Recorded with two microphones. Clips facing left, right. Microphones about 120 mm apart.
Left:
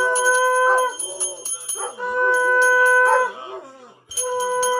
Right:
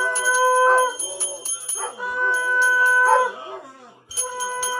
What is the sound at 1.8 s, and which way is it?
Dog, 15° left (ahead or behind).